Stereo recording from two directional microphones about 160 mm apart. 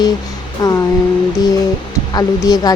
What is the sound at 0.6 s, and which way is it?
Speech, 25° left (ahead or behind).